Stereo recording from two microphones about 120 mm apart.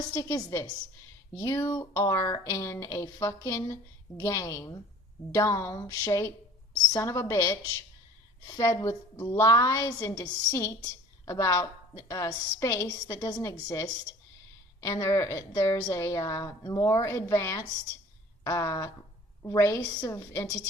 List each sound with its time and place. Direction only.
0.1 s a woman's voice: 30° left (ahead or behind)